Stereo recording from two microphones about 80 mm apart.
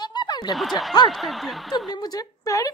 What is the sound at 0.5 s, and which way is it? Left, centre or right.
Speech, centre.